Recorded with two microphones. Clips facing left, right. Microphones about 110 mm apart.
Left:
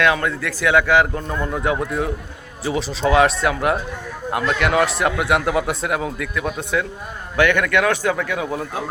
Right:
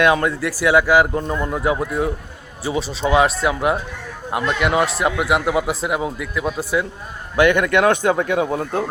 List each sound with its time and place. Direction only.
0.0 s a man's voice: 20° right (ahead or behind)
1.8 s a man's voice: 5° right (ahead or behind); by 8.8 s 35° right (ahead or behind)